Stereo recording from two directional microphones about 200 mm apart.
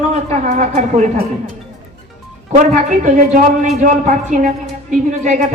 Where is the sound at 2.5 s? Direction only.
35° right (ahead or behind).